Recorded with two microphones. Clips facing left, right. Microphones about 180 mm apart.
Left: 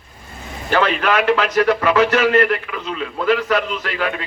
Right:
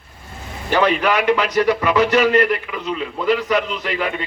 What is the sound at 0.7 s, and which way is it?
A man's voice, 15° right (ahead or behind).